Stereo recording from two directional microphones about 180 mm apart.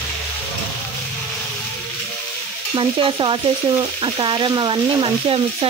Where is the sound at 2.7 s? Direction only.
30° right (ahead or behind).